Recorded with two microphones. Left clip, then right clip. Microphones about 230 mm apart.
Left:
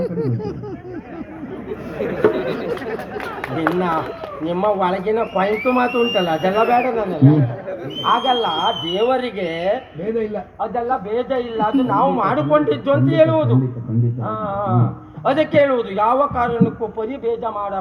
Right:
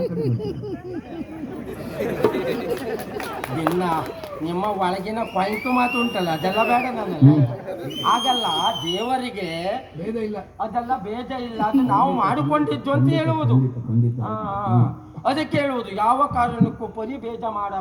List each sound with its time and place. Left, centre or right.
0.0 s a sound: centre
2.0 s chatter: right
4.4 s speech: right